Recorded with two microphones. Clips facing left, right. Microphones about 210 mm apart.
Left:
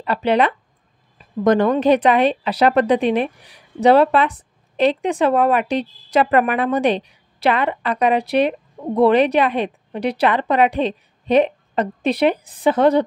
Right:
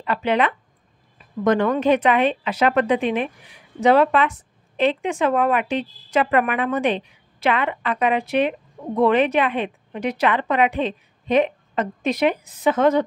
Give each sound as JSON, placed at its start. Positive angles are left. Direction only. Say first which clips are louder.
{"t": 0.0, "sound": "a woman's voice", "louder": "left 3 dB", "side_deg": 35}